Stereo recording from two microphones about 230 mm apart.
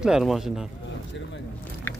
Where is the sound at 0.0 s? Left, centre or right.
Centre.